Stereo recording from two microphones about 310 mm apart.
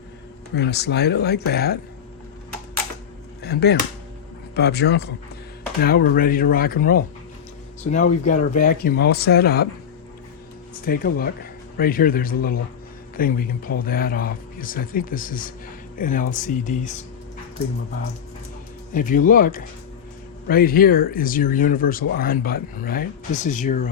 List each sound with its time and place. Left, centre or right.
0.5 s speech: left
3.4 s speech: left
8.1 s speech: left
10.8 s speech: left
18.9 s speech: left